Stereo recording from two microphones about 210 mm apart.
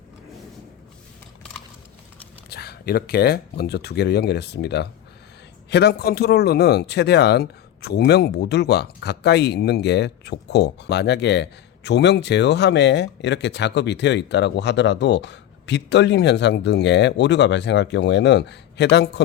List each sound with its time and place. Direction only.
2.5 s speech: 50° left (ahead or behind)